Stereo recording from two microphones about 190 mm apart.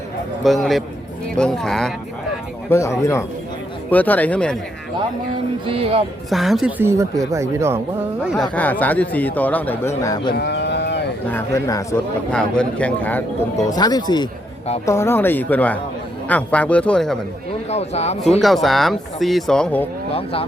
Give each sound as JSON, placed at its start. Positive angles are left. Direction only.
{"t": 0.4, "sound": "speech", "side_deg": 0}
{"t": 2.6, "sound": "speech", "side_deg": 15}
{"t": 5.6, "sound": "speech", "side_deg": -30}
{"t": 6.3, "sound": "speech", "side_deg": 0}
{"t": 8.2, "sound": "speech", "side_deg": 0}
{"t": 8.5, "sound": "speech", "side_deg": 10}
{"t": 10.3, "sound": "livestock", "side_deg": 60}
{"t": 11.3, "sound": "speech", "side_deg": 15}
{"t": 12.3, "sound": "speech", "side_deg": 5}
{"t": 13.7, "sound": "speech", "side_deg": 20}
{"t": 17.7, "sound": "speech", "side_deg": 35}
{"t": 18.3, "sound": "speech", "side_deg": 0}
{"t": 20.1, "sound": "speech", "side_deg": 30}